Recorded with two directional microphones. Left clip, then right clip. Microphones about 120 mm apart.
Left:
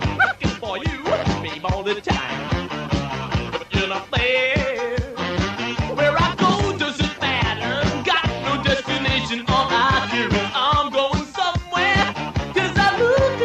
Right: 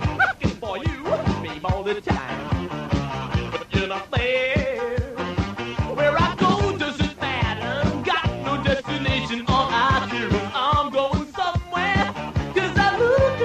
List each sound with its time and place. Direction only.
0.2 s music: 40° right (ahead or behind)
3.7 s music: 30° right (ahead or behind)
5.9 s music: 35° right (ahead or behind)